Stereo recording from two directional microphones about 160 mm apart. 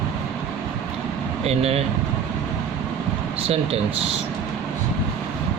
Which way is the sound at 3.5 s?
40° right (ahead or behind).